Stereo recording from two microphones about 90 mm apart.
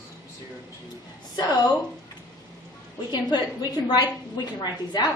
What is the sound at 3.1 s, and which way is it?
Speech, 50° left (ahead or behind).